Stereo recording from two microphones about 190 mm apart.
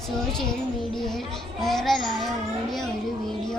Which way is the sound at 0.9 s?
Centre (ahead or behind).